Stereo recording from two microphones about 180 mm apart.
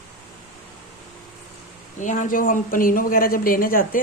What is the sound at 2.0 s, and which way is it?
A woman's voice, 45° left (ahead or behind).